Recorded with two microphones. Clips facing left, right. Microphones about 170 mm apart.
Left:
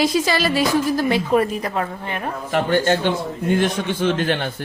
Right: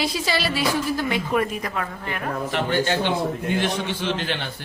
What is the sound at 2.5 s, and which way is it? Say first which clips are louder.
A man's voice: left 6 dB; 50° left (ahead or behind).